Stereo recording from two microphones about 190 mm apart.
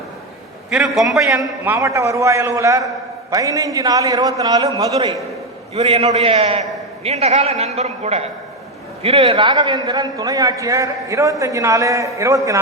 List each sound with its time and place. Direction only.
0.7 s a man's voice: centre (ahead or behind); by 4.6 s 20° right (ahead or behind)
5.7 s a man's voice: 35° right (ahead or behind); by 12.4 s 15° right (ahead or behind)